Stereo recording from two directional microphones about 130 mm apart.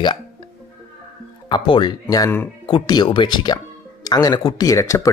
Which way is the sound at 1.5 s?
35° left (ahead or behind).